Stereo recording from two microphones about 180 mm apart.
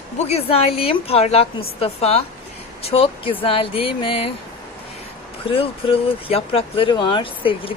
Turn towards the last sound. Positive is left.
turn(degrees=30)  # may be behind; listen again after turning